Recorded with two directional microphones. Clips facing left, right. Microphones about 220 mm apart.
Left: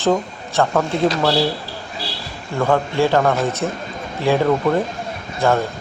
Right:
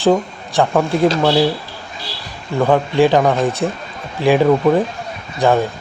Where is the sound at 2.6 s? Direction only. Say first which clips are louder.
Right 4 dB; 15° right (ahead or behind).